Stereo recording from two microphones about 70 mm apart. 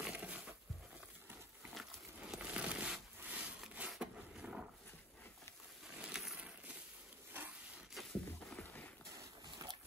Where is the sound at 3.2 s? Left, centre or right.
Right.